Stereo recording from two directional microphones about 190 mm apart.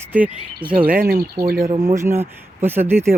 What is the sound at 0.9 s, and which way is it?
Speech, 55° right (ahead or behind).